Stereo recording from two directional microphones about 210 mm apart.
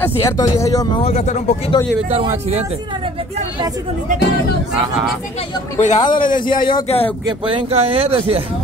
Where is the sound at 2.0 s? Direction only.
30° right (ahead or behind).